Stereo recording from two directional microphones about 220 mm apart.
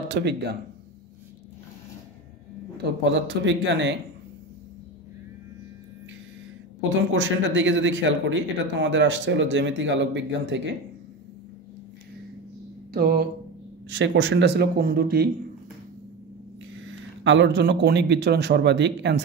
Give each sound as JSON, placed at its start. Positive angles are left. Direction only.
{"t": 0.1, "sound": "speech", "side_deg": -50}
{"t": 2.8, "sound": "speech", "side_deg": -50}
{"t": 7.0, "sound": "speech", "side_deg": -55}
{"t": 12.9, "sound": "speech", "side_deg": -45}
{"t": 13.8, "sound": "speech", "side_deg": -55}
{"t": 16.7, "sound": "speech", "side_deg": -55}